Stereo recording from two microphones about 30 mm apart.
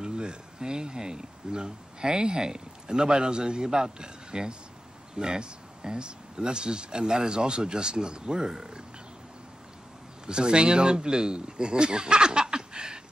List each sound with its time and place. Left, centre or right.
0.0 s speech: right
10.2 s speech: right